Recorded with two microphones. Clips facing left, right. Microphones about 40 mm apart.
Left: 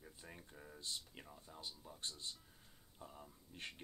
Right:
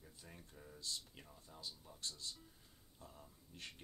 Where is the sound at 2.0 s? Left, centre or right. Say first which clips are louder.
Even; left.